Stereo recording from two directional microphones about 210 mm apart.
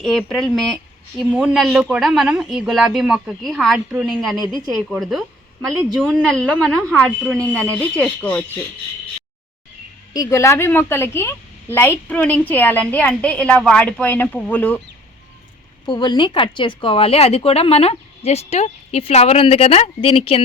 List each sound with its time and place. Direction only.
0.0 s a woman's voice: centre (ahead or behind)
10.1 s a woman's voice: 15° left (ahead or behind)
15.9 s speech: 20° left (ahead or behind)